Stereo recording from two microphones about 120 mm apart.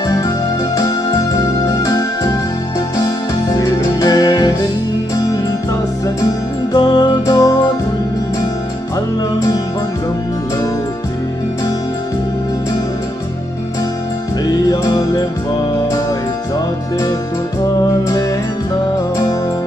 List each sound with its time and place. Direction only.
0.7 s music: 30° left (ahead or behind)
3.5 s music: 30° left (ahead or behind)
6.7 s music: 35° left (ahead or behind)
14.7 s music: 30° left (ahead or behind)